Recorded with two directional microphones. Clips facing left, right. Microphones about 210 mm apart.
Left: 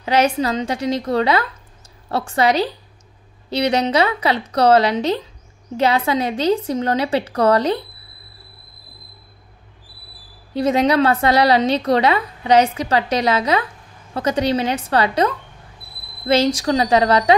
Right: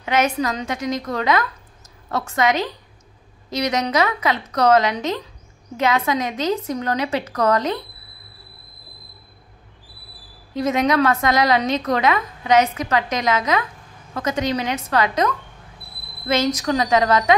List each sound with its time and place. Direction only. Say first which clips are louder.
0.0 s a woman's voice: left 3 dB; 30° left (ahead or behind)
10.5 s a woman's voice: left 3 dB; 30° left (ahead or behind)